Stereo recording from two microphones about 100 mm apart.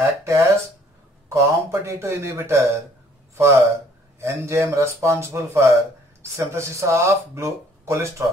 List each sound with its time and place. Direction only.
0.0 s speech: 30° right (ahead or behind)